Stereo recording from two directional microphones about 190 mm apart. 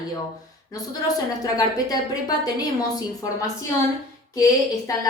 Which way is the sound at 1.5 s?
20° left (ahead or behind).